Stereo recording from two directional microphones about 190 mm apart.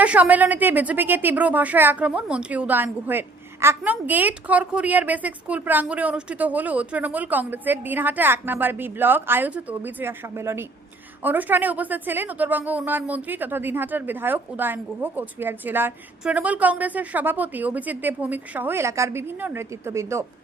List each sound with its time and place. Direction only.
0.0 s a woman's voice: 10° right (ahead or behind)